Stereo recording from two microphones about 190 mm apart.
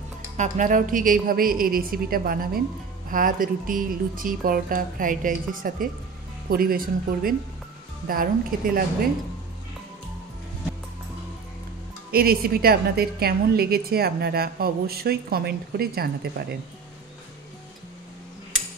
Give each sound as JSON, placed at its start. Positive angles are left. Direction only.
{"t": 0.4, "sound": "a woman's voice", "side_deg": -40}
{"t": 12.1, "sound": "a woman's voice", "side_deg": -50}